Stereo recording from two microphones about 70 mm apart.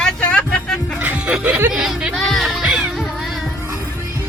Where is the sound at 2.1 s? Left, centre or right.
Centre.